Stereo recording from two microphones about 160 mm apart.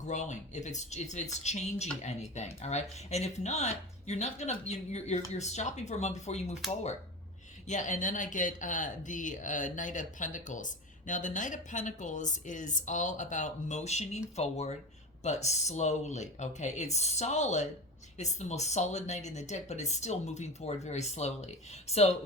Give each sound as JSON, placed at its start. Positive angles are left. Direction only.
{"t": 0.0, "sound": "speech", "side_deg": 45}
{"t": 7.7, "sound": "speech", "side_deg": 50}